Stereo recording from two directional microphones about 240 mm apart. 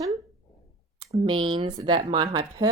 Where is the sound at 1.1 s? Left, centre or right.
Right.